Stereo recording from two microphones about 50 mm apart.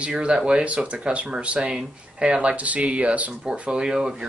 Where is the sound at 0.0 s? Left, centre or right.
Right.